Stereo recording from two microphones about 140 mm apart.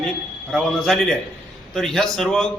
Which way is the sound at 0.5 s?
5° left (ahead or behind).